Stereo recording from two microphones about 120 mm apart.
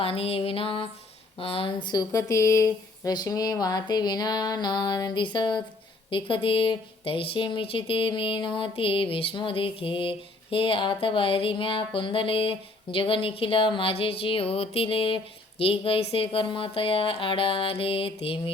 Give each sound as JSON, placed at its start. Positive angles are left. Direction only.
{"t": 0.0, "sound": "speech", "side_deg": 55}
{"t": 1.9, "sound": "speech", "side_deg": 30}
{"t": 3.0, "sound": "a sound", "side_deg": 30}
{"t": 6.1, "sound": "speech", "side_deg": 45}